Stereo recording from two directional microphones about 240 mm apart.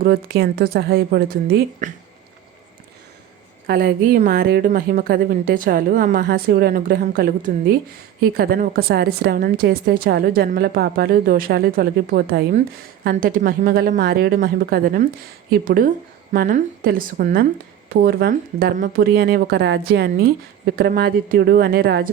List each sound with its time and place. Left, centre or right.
0.0 s a woman's voice: right
3.7 s a woman's voice: right